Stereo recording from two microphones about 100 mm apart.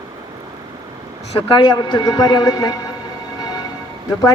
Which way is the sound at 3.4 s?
45° left (ahead or behind).